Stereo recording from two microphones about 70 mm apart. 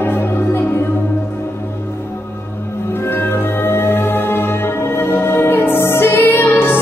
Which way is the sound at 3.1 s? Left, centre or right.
Left.